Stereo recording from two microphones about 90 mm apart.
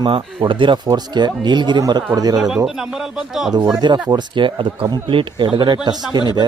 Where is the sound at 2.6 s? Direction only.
5° right (ahead or behind).